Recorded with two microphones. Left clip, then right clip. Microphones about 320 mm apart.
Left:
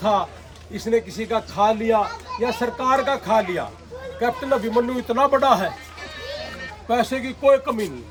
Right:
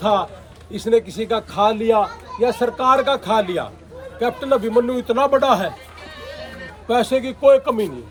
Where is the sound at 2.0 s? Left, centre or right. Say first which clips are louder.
Right 4 dB; left.